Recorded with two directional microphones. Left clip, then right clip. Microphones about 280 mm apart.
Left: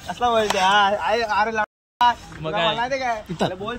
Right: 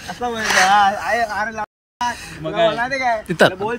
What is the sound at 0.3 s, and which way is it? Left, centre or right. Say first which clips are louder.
Speech: right 4 dB; left.